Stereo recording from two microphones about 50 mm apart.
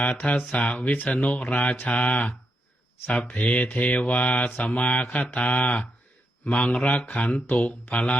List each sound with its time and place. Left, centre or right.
0.0 s mantra: left
6.4 s speech: left
6.8 s mantra: left